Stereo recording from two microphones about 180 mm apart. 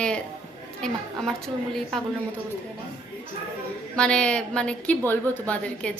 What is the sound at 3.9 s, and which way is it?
A woman's voice, 5° left (ahead or behind).